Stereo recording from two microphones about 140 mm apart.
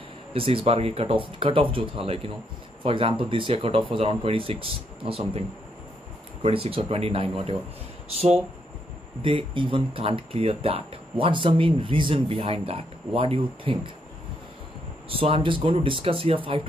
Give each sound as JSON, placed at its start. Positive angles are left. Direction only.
{"t": 0.3, "sound": "speech", "side_deg": -40}
{"t": 6.4, "sound": "speech", "side_deg": -40}
{"t": 9.2, "sound": "speech", "side_deg": -40}
{"t": 15.0, "sound": "speech", "side_deg": -40}